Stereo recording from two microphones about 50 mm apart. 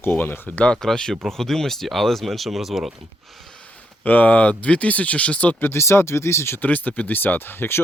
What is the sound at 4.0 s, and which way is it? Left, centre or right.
Speech, left.